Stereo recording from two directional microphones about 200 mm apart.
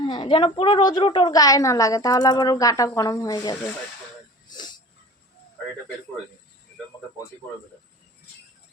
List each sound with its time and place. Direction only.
0.0 s a woman's voice: 25° left (ahead or behind)
4.4 s wheeze: 20° left (ahead or behind)